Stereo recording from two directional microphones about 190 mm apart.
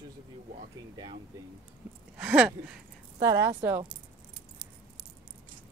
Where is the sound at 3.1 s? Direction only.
20° right (ahead or behind).